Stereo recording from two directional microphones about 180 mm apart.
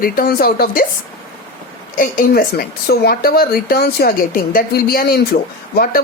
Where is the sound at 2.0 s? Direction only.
55° left (ahead or behind).